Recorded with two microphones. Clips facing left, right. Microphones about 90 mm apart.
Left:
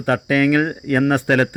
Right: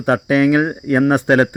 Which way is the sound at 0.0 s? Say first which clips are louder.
Right 3 dB; 20° right (ahead or behind).